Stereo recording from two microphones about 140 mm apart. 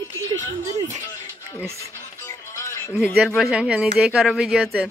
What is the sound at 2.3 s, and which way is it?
Music, 20° left (ahead or behind).